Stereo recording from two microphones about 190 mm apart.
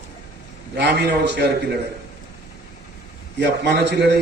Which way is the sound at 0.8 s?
65° right (ahead or behind).